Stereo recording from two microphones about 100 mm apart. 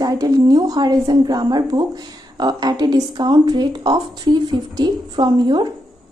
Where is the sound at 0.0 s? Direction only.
40° right (ahead or behind).